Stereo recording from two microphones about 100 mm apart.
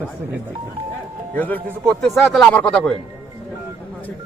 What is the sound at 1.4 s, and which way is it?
A man's voice, 15° left (ahead or behind).